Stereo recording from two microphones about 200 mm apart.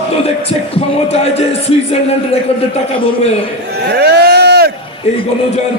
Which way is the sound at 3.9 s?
55° right (ahead or behind).